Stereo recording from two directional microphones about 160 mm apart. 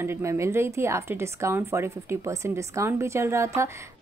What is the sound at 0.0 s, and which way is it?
Speech, 15° right (ahead or behind).